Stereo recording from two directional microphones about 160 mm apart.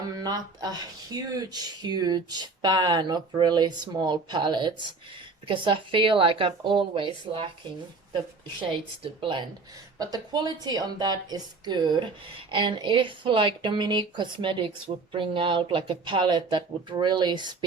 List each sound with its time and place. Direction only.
0.1 s speech: 25° right (ahead or behind)
9.2 s speech: 30° right (ahead or behind)